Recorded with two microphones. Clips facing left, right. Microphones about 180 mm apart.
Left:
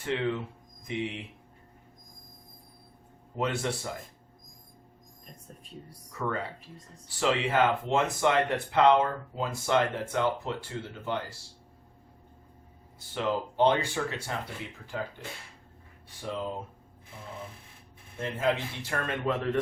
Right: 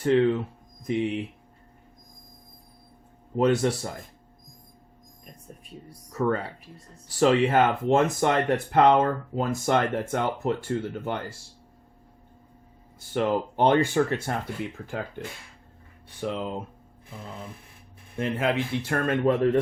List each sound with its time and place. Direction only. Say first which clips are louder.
0.0 s speech: right 9 dB; 40° right (ahead or behind)
3.3 s speech: right 8 dB; 40° right (ahead or behind)
6.1 s speech: right 7 dB; 40° right (ahead or behind)
13.0 s speech: right 5 dB; 50° right (ahead or behind)
16.0 s speech: right 5 dB; 65° right (ahead or behind)
18.2 s speech: right 3 dB; 65° right (ahead or behind); by 19.5 s 45° right (ahead or behind)